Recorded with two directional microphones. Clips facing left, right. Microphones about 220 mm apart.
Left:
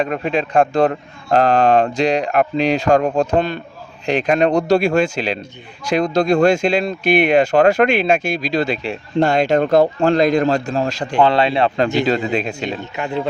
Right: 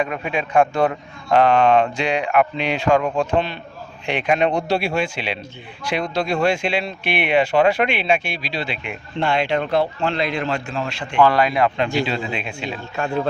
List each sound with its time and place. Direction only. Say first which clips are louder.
0.0 s a man's voice: left 4 dB; 35° left (ahead or behind)
11.2 s speech: left 1 dB; 25° left (ahead or behind)
12.0 s a man's voice: left 7 dB; 40° left (ahead or behind)
12.8 s speech: right 4 dB; 20° left (ahead or behind)